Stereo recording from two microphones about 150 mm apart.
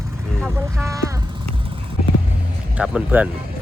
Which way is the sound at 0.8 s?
20° right (ahead or behind).